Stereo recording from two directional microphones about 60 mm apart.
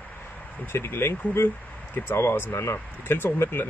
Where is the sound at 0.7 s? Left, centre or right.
Left.